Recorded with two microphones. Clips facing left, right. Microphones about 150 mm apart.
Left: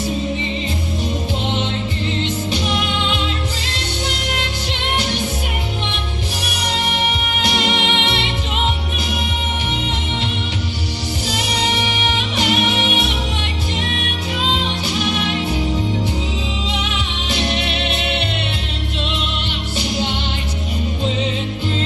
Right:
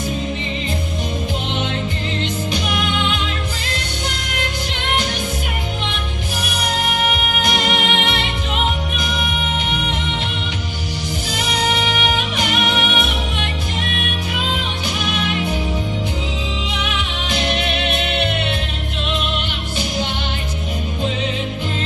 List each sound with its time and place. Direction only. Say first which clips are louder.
7.4 s music: left 1 dB; 50° right (ahead or behind)